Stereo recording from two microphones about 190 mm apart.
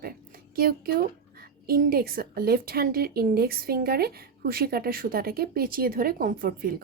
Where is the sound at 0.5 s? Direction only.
55° right (ahead or behind).